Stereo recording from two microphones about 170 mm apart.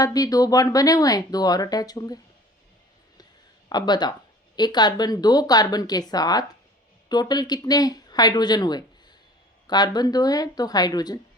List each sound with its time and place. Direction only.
0.0 s speech: 20° left (ahead or behind)
3.7 s speech: 25° left (ahead or behind)